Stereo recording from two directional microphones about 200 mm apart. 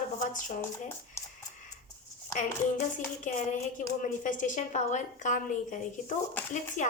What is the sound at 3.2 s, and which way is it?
A woman's voice, 40° left (ahead or behind).